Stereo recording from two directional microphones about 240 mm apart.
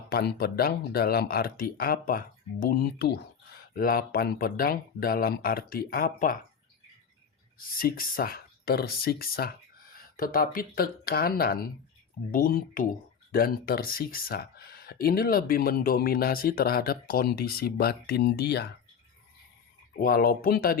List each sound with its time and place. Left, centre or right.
0.1 s speech: left
7.8 s speech: left
20.0 s speech: left